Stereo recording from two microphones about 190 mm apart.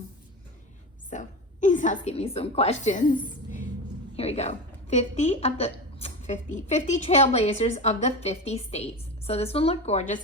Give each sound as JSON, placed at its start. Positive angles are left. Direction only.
{"t": 1.1, "sound": "a woman's voice", "side_deg": 40}
{"t": 4.2, "sound": "a woman's voice", "side_deg": 35}